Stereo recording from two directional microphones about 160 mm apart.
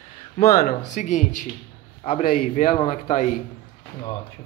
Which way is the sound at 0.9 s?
50° left (ahead or behind).